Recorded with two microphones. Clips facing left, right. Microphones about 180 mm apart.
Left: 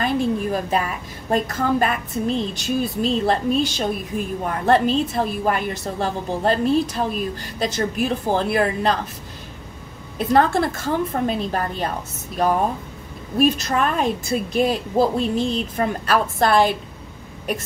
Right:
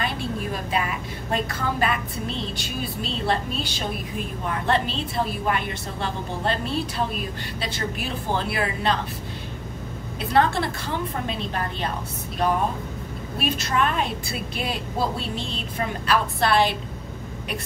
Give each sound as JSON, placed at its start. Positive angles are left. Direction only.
{"t": 0.0, "sound": "a woman's voice", "side_deg": 45}
{"t": 10.1, "sound": "a woman's voice", "side_deg": 45}
{"t": 13.4, "sound": "a woman's voice", "side_deg": 40}